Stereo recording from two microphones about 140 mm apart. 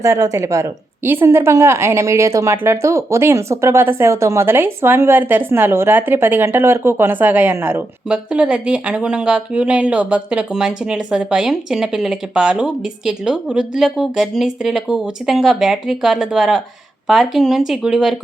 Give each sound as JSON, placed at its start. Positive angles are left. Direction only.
{"t": 0.0, "sound": "a woman's voice", "side_deg": -25}